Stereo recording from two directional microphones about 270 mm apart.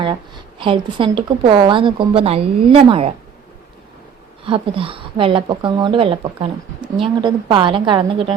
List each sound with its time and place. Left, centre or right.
0.0 s speech: centre
4.4 s speech: centre